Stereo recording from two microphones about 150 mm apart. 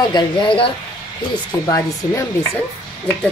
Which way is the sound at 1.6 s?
20° left (ahead or behind).